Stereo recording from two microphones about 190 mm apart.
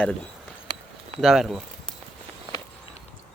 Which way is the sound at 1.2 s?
Centre (ahead or behind).